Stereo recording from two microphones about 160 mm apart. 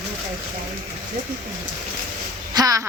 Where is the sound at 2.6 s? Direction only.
20° right (ahead or behind).